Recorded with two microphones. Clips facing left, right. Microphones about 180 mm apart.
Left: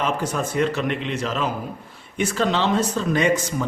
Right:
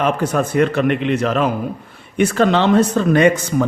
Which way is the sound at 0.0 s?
60° right (ahead or behind).